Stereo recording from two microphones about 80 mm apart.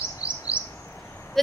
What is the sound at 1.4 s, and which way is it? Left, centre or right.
Speech, centre.